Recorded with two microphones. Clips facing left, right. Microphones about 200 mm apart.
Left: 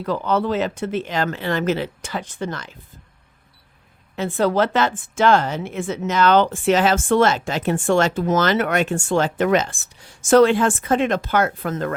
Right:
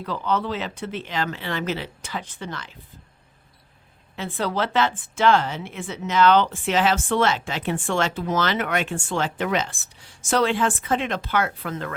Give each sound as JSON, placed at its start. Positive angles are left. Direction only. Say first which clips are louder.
{"t": 0.0, "sound": "a woman's voice", "louder": "left 4 dB", "side_deg": 45}
{"t": 4.2, "sound": "a woman's voice", "louder": "left 7 dB", "side_deg": 45}